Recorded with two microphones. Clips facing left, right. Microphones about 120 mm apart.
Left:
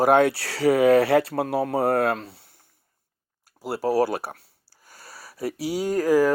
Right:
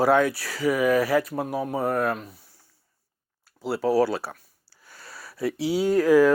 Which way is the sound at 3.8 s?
45° left (ahead or behind).